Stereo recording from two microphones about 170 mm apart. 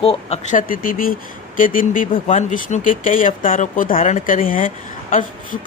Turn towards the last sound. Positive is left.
turn(degrees=50)  # may be behind; listen again after turning